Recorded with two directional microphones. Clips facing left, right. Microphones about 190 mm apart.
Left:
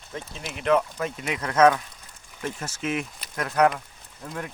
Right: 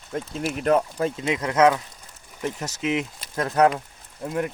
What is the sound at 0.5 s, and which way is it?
Speech, 40° right (ahead or behind).